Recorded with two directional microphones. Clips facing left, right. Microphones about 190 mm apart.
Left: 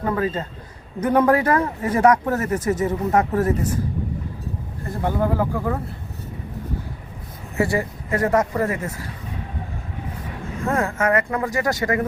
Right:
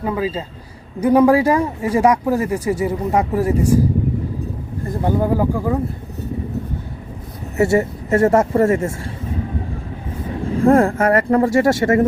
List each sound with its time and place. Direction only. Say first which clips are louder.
0.0 s speech: right 1 dB; 10° right (ahead or behind)
4.9 s speech: right 4 dB; 15° right (ahead or behind)
7.6 s speech: right 6 dB; 25° right (ahead or behind)
10.4 s speech: right 10 dB; 30° right (ahead or behind)